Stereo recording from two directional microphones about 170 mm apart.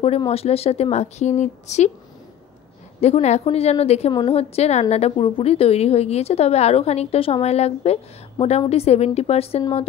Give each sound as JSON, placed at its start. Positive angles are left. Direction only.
{"t": 0.3, "sound": "a woman's voice", "side_deg": 35}
{"t": 3.0, "sound": "a woman's voice", "side_deg": 40}